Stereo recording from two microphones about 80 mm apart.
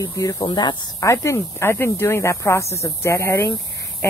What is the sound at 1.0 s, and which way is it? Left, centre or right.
Speech, left.